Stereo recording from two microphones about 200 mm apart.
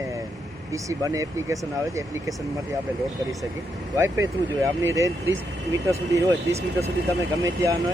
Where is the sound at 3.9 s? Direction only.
15° right (ahead or behind).